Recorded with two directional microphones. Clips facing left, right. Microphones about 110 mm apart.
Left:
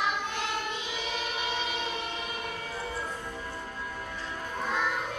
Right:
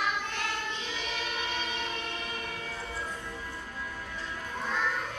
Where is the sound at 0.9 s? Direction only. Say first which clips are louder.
Left 2 dB; 15° left (ahead or behind).